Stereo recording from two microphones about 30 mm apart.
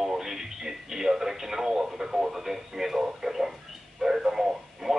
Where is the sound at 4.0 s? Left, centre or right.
Centre.